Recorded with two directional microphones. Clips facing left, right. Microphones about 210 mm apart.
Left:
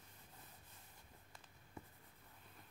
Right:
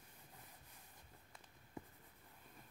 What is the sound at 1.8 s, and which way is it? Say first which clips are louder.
Writing: right 3 dB; 15° right (ahead or behind).